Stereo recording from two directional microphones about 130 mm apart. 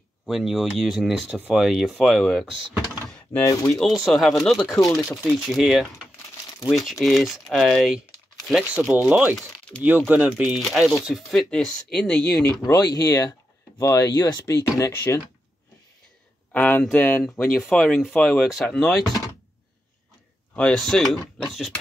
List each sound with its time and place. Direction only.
0.3 s speech: centre (ahead or behind)
3.1 s a sound: 10° left (ahead or behind)
3.4 s speech: 25° left (ahead or behind)
3.8 s speech: centre (ahead or behind)
8.6 s speech: 10° right (ahead or behind); by 12.2 s 5° left (ahead or behind)
12.4 s speech: 25° left (ahead or behind)
16.5 s speech: 10° left (ahead or behind)
20.5 s speech: 5° left (ahead or behind)